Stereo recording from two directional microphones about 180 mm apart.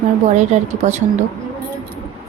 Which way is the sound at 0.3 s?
40° right (ahead or behind).